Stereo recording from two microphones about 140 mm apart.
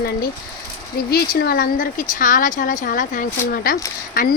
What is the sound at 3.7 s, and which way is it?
Speech, 90° left.